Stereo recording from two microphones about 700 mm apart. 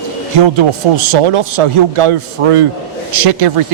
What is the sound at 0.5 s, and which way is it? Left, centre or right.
Speech, right.